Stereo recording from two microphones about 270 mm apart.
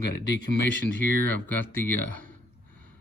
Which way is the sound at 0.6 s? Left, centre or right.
Centre.